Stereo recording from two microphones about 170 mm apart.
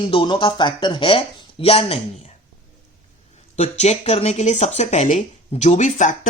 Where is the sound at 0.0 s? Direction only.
30° left (ahead or behind).